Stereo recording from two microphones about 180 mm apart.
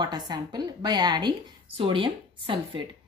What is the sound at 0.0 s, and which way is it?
A woman's voice, 25° right (ahead or behind).